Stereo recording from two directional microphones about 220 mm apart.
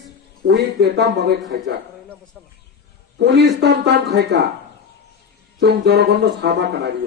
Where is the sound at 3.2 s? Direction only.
50° right (ahead or behind).